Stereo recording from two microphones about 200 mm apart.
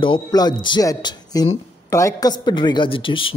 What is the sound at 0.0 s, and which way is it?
Speech, 20° left (ahead or behind).